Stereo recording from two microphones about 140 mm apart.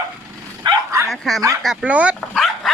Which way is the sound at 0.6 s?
20° right (ahead or behind).